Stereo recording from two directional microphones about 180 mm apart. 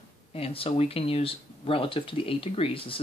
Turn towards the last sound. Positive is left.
turn(degrees=30)  # may be behind; listen again after turning